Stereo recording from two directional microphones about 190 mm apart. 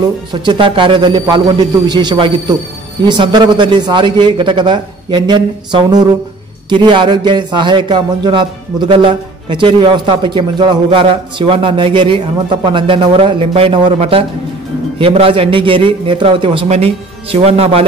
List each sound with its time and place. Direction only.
0.0 s speech: 25° right (ahead or behind)